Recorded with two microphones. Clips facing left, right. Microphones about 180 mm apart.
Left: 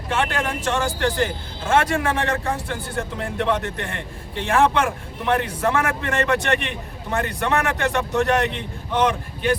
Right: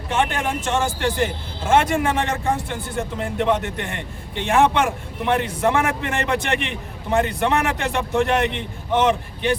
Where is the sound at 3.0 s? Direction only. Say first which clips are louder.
Right 3 dB; 10° right (ahead or behind).